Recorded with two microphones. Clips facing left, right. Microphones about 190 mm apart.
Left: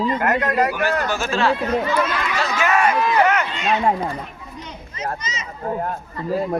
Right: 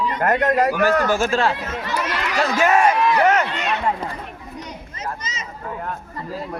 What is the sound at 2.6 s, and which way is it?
Speech, 45° right (ahead or behind).